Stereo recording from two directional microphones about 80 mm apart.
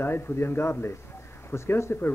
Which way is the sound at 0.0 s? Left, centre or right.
Left.